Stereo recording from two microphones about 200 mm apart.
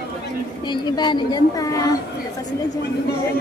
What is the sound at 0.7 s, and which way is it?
A woman's voice, 20° left (ahead or behind).